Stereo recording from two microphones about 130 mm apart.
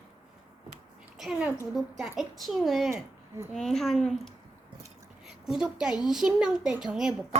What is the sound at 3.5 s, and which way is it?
Speech, 5° left (ahead or behind).